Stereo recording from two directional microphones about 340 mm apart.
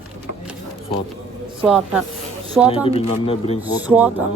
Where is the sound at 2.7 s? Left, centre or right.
Centre.